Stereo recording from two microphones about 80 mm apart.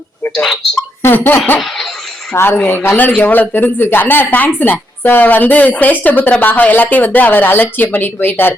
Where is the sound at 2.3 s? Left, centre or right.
Left.